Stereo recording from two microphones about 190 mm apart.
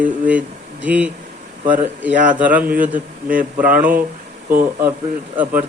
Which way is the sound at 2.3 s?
10° right (ahead or behind).